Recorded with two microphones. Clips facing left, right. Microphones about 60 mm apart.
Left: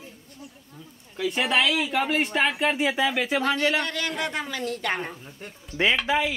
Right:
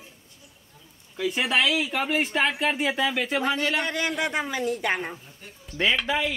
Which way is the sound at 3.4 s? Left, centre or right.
Centre.